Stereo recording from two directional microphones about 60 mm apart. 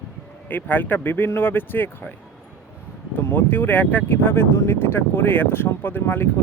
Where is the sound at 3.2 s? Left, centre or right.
Left.